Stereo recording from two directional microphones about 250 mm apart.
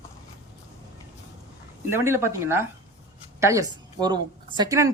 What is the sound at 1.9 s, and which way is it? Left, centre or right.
A woman's voice, centre.